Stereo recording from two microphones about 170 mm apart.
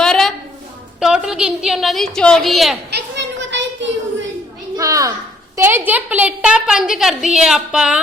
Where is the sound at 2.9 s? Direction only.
90° right.